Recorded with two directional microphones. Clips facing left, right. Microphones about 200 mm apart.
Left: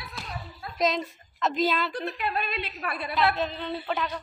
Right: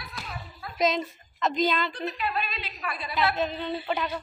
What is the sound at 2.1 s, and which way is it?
A woman's voice, 55° left (ahead or behind).